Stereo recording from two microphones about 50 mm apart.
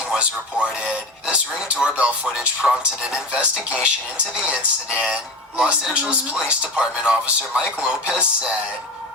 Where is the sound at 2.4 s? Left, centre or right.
Centre.